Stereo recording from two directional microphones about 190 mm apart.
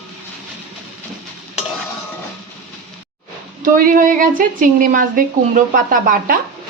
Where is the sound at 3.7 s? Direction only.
45° right (ahead or behind).